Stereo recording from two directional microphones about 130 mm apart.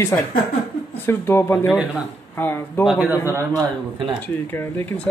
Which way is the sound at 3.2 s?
20° right (ahead or behind).